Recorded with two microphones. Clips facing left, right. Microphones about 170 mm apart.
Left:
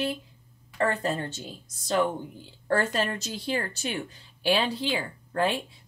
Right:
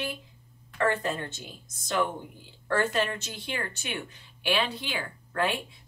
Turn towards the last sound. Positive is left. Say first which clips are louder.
# left 2 dB
turn(degrees=30)  # may be behind; listen again after turning